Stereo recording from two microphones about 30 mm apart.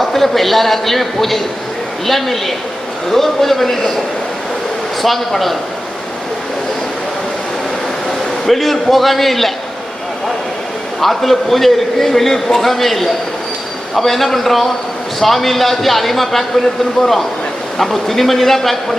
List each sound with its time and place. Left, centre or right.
0.0 s a man's voice: centre
5.0 s a man's voice: centre
8.4 s a man's voice: centre
11.0 s a man's voice: centre